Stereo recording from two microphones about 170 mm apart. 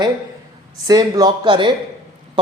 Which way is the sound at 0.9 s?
20° right (ahead or behind).